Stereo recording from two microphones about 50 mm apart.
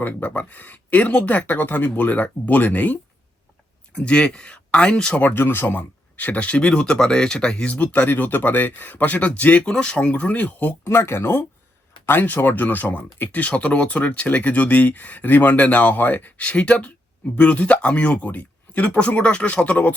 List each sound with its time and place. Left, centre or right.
0.0 s speech: left
3.9 s speech: left
5.2 s speech: left; by 7.7 s centre
7.7 s speech: left
10.2 s speech: left
10.8 s speech: left
12.0 s speech: left
16.4 s speech: left